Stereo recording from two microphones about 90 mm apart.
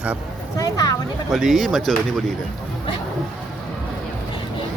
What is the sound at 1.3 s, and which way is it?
Speech, 5° right (ahead or behind).